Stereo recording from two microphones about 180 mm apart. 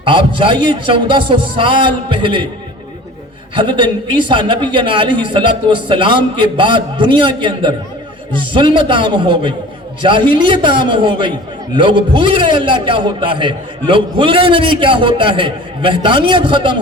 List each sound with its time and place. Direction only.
0.0 s a man's voice: 30° right (ahead or behind)
3.5 s a man's voice: 25° right (ahead or behind)